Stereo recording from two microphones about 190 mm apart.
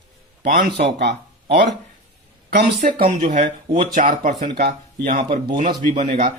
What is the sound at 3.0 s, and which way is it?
Speech, 40° right (ahead or behind).